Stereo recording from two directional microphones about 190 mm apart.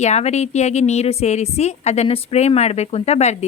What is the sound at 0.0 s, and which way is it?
Speech, 35° left (ahead or behind).